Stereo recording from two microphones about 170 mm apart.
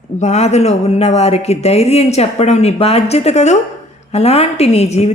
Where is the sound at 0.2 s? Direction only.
40° left (ahead or behind).